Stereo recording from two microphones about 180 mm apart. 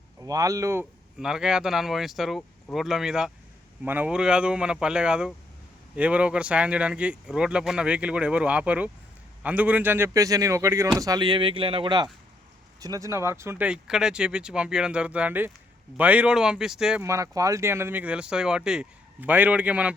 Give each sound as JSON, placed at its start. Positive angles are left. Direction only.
{"t": 0.2, "sound": "speech", "side_deg": -20}
{"t": 1.2, "sound": "speech", "side_deg": -5}
{"t": 17.0, "sound": "speech", "side_deg": -15}